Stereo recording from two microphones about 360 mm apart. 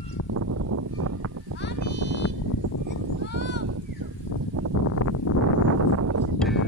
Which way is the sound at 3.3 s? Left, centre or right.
Left.